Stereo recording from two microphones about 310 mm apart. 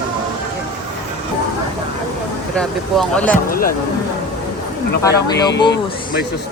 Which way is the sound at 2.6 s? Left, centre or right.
Centre.